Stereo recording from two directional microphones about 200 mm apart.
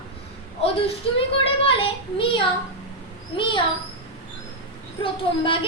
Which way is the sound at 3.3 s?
25° left (ahead or behind).